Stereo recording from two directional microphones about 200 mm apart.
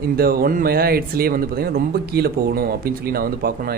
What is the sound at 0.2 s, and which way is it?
Speech, 50° right (ahead or behind).